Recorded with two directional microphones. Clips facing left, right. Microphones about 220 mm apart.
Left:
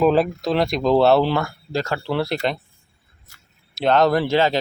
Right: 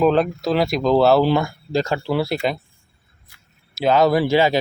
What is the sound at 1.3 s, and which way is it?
Speech, 15° right (ahead or behind).